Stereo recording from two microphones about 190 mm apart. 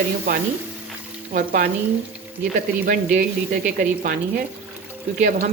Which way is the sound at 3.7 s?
45° right (ahead or behind).